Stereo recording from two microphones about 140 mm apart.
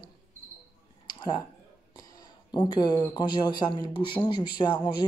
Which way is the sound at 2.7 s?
35° left (ahead or behind).